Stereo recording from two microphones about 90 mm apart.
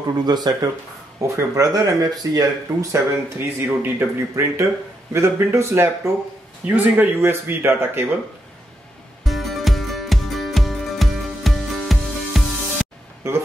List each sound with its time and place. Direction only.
0.2 s speech: 50° right (ahead or behind)
1.2 s speech: 35° right (ahead or behind)
3.3 s speech: 25° right (ahead or behind)
6.6 s speech: 20° right (ahead or behind)
9.2 s music: centre (ahead or behind)
13.2 s speech: 30° right (ahead or behind)